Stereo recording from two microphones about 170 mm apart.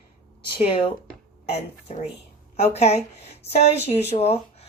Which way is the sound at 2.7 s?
40° left (ahead or behind).